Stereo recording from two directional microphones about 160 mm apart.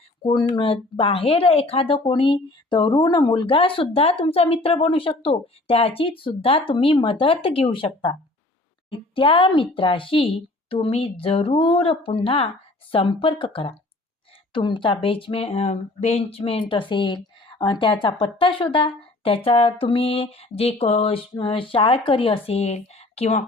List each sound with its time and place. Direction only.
0.2 s speech: 30° left (ahead or behind)
9.1 s speech: 35° left (ahead or behind)